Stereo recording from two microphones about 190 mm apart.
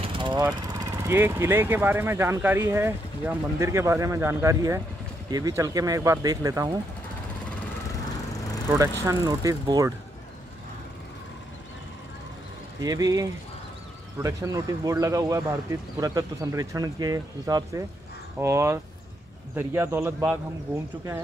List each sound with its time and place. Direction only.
0.0 s jackhammer: 25° right (ahead or behind)
0.7 s speech: 15° right (ahead or behind)
9.0 s speech: 15° right (ahead or behind)
12.8 s speech: 20° right (ahead or behind)